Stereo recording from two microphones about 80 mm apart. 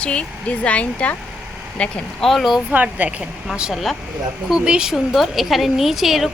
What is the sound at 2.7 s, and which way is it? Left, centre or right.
Speech, right.